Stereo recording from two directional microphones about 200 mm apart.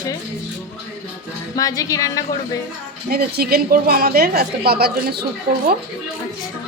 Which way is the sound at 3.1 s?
50° right (ahead or behind).